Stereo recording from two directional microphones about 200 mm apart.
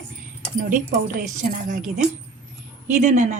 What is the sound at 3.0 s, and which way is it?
Speech, 35° right (ahead or behind).